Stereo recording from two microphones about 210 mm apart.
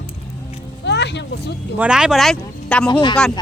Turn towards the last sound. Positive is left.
turn(degrees=20)  # may be behind; listen again after turning